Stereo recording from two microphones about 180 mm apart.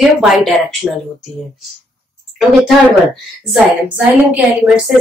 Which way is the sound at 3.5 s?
10° right (ahead or behind).